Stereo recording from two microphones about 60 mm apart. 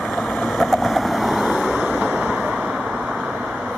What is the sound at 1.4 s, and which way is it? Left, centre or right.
Vehicle, centre.